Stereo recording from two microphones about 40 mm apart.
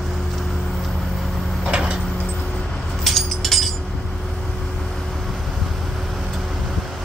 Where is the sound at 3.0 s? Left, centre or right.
Centre.